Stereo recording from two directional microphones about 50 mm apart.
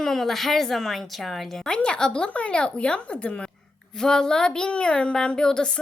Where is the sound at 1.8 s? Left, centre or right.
Centre.